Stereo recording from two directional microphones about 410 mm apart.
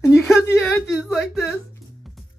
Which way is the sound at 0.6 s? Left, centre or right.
Centre.